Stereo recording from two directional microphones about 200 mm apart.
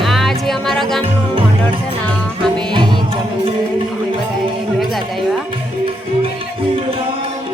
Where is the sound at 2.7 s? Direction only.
25° right (ahead or behind).